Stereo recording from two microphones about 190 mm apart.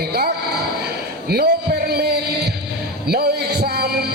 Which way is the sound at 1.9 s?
60° right (ahead or behind).